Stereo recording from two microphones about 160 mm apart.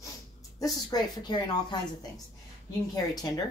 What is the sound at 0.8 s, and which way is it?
Speech, 25° left (ahead or behind).